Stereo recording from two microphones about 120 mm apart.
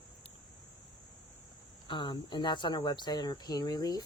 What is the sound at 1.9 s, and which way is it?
Speech, 40° left (ahead or behind).